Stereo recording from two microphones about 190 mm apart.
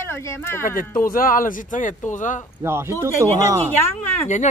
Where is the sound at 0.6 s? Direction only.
50° left (ahead or behind).